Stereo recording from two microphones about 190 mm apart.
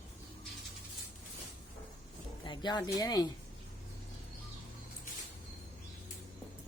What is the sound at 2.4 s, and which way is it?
Speech, 25° left (ahead or behind).